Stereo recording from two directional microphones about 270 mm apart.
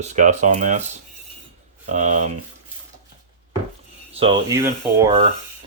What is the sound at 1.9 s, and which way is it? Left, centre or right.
Speech, right.